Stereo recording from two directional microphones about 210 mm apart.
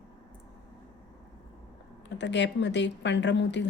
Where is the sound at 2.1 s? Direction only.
55° left (ahead or behind).